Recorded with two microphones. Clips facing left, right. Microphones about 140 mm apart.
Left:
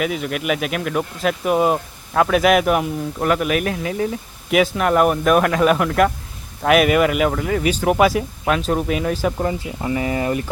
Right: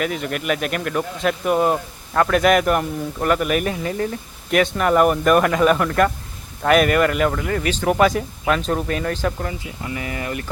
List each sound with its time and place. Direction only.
0.0 s speech: 5° left (ahead or behind)
9.4 s speech: 30° left (ahead or behind)